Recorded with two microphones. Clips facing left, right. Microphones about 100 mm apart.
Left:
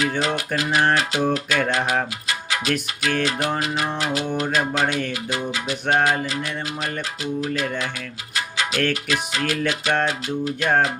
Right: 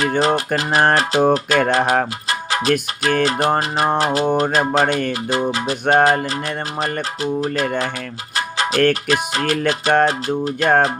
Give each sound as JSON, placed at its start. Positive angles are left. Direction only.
{"t": 0.0, "sound": "music", "side_deg": -40}
{"t": 7.4, "sound": "music", "side_deg": -40}